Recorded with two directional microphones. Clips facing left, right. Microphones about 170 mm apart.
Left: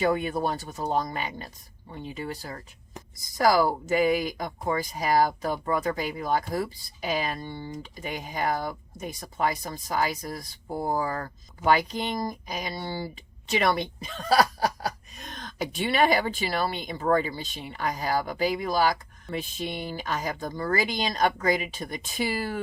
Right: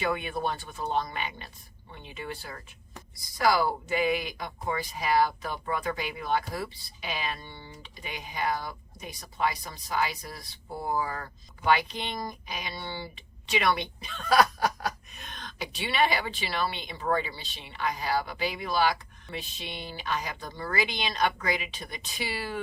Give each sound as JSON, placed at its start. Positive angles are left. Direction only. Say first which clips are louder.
{"t": 0.0, "sound": "speech", "louder": "left 5 dB", "side_deg": 40}